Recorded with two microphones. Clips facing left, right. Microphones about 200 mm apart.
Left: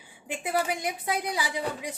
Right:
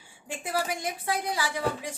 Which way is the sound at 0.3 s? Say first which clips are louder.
Left 2 dB; 15° left (ahead or behind).